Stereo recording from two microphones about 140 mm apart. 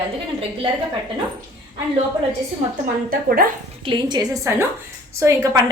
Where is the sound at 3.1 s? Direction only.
90° right.